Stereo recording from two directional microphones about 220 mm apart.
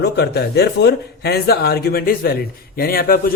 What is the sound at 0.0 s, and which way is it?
Speech, 45° left (ahead or behind).